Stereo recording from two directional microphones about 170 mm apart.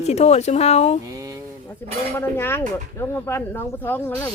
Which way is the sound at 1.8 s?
15° left (ahead or behind).